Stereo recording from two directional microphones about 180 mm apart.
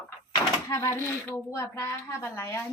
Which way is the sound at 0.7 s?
15° left (ahead or behind).